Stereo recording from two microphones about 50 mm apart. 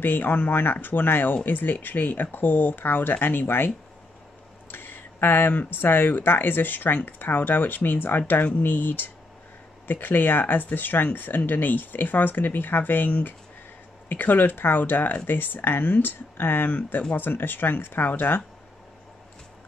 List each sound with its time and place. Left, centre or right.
0.0 s speech: left